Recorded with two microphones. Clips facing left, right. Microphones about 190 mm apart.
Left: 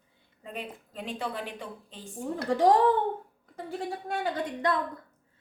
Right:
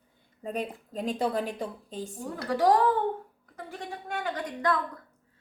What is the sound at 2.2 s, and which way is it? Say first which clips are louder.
A woman's voice: left 2 dB; 25° left (ahead or behind).